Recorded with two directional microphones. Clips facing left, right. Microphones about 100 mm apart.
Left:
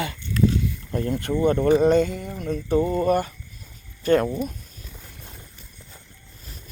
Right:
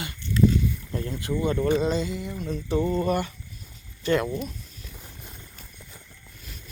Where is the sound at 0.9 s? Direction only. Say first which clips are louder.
Left 6 dB; 50° left (ahead or behind).